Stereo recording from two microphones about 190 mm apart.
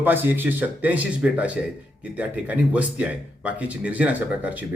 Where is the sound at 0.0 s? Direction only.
10° right (ahead or behind).